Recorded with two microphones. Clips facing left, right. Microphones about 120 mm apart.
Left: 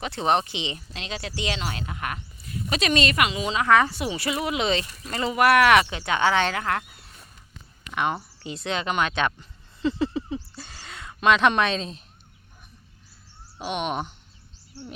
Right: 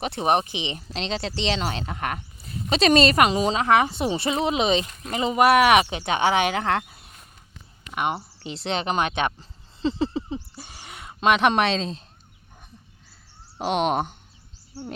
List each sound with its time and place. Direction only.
0.0 s speech: 20° right (ahead or behind)
0.8 s speech: 30° right (ahead or behind)
3.7 s speech: 20° right (ahead or behind)
7.9 s speech: 15° right (ahead or behind)
8.4 s speech: 25° right (ahead or behind)
9.4 s a sound: 25° right (ahead or behind)
13.6 s speech: 75° right (ahead or behind)